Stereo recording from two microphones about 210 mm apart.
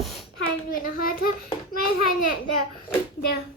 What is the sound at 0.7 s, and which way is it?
Speech, 45° left (ahead or behind).